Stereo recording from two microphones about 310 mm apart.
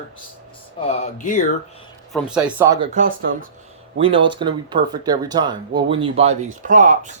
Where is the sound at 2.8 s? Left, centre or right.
Right.